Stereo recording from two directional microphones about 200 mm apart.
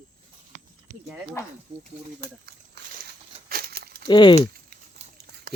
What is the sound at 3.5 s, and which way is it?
Crumpling, 50° right (ahead or behind).